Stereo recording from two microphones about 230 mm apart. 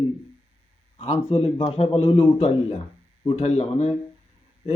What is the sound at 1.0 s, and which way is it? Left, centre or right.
A man's voice, left.